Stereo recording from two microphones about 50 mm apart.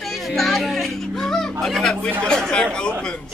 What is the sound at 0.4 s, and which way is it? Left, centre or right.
Music, centre.